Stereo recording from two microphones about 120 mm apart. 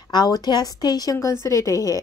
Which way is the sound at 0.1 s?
30° left (ahead or behind).